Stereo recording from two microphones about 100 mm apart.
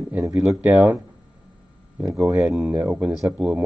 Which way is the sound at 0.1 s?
15° right (ahead or behind).